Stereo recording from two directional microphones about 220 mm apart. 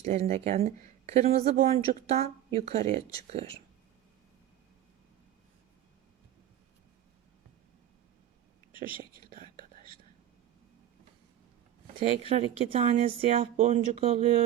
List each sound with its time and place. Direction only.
0.0 s speech: 30° right (ahead or behind)
8.8 s speech: 40° right (ahead or behind)
9.3 s whispering: 40° right (ahead or behind)
12.3 s speech: 25° right (ahead or behind)